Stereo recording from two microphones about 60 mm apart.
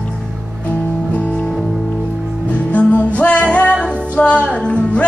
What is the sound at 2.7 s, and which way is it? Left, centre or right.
Music, left.